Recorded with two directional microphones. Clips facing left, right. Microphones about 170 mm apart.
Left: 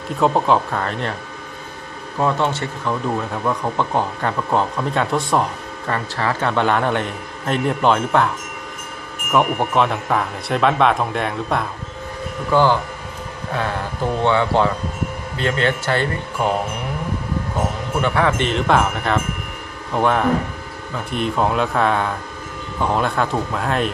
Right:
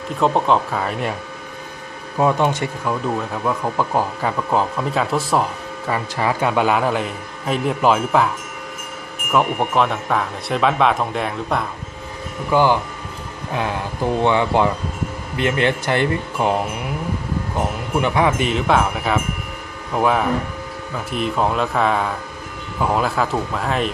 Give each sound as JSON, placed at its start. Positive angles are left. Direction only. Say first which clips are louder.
{"t": 0.2, "sound": "speech", "louder": "even", "side_deg": 0}
{"t": 2.1, "sound": "speech", "louder": "right 2 dB", "side_deg": -15}
{"t": 2.9, "sound": "speech", "louder": "left 2 dB", "side_deg": 0}
{"t": 9.3, "sound": "speech", "louder": "left 1 dB", "side_deg": 0}
{"t": 12.5, "sound": "speech", "louder": "even", "side_deg": -15}
{"t": 18.0, "sound": "speech", "louder": "even", "side_deg": -15}